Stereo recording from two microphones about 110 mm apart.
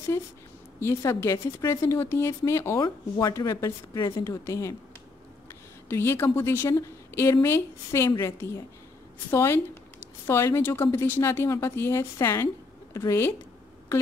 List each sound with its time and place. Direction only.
0.7 s speech: 25° left (ahead or behind)
2.8 s a woman's voice: 35° left (ahead or behind)
5.9 s speech: 20° left (ahead or behind)